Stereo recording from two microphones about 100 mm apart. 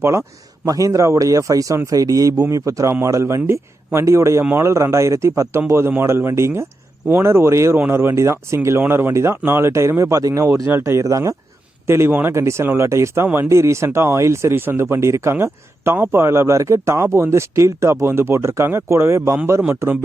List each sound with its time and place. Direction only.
0.0 s speech: 30° right (ahead or behind)